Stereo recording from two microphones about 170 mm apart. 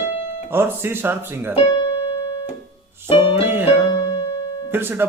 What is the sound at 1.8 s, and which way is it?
Keyboard, 30° left (ahead or behind).